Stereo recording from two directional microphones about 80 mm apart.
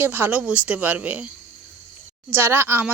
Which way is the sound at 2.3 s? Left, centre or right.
Right.